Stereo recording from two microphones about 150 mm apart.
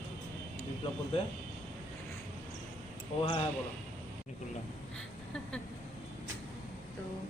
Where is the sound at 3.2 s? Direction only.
40° left (ahead or behind).